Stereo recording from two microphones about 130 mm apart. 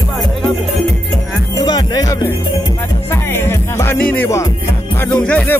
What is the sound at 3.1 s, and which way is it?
Music, 20° left (ahead or behind).